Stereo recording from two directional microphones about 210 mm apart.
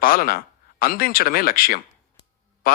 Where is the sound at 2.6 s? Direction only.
45° left (ahead or behind).